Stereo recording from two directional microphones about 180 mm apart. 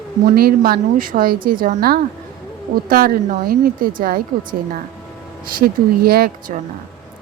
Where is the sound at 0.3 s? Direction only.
55° right (ahead or behind).